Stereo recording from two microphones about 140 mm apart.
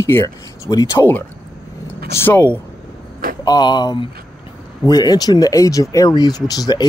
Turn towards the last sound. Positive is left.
turn(degrees=30)  # may be behind; listen again after turning